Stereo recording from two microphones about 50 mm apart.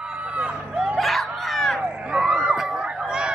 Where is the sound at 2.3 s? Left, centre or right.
Centre.